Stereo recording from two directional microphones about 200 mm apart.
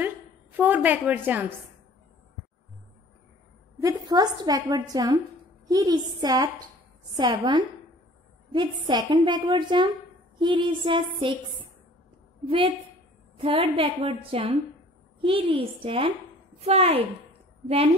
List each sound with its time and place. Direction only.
0.0 s a sound: 10° right (ahead or behind)
3.8 s a woman's voice: 20° right (ahead or behind)
12.4 s a woman's voice: 25° right (ahead or behind)